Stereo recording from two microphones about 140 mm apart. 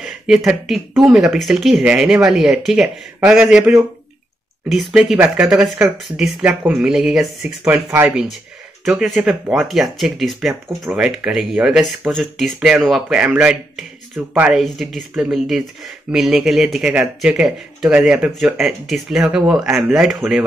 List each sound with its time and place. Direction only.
0.0 s speech: 5° right (ahead or behind)
14.6 s speech: centre (ahead or behind)